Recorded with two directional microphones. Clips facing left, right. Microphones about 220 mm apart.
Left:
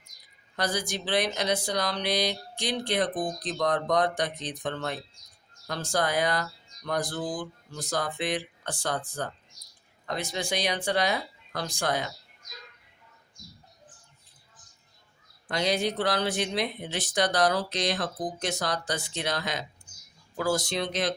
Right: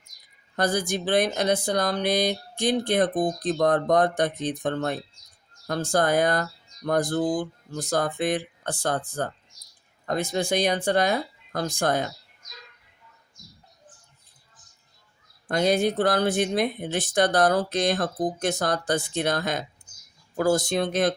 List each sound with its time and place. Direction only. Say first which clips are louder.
0.5 s speech: right 5 dB; 50° right (ahead or behind)
15.4 s speech: right 5 dB; 50° right (ahead or behind)